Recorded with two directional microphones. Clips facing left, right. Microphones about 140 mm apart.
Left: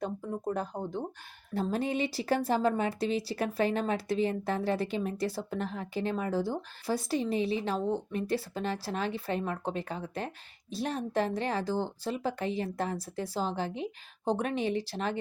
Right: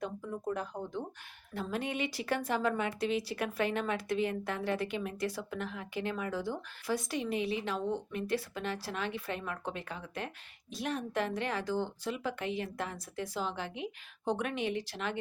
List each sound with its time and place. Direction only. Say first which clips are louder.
0.0 s speech: left 3 dB; 35° left (ahead or behind)